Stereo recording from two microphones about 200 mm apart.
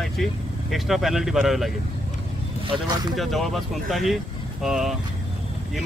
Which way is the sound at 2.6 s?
25° right (ahead or behind).